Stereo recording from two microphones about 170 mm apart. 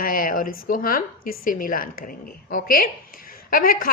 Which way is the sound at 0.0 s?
55° left (ahead or behind).